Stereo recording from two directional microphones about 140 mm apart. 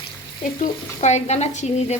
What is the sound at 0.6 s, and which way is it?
Frying, 55° left (ahead or behind).